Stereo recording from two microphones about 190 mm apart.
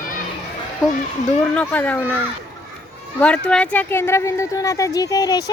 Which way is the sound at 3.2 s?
5° left (ahead or behind).